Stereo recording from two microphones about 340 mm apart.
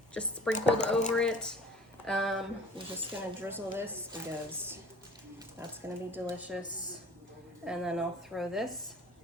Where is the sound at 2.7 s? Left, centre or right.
Centre.